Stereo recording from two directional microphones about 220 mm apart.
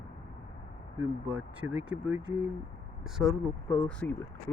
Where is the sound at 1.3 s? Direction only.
5° right (ahead or behind).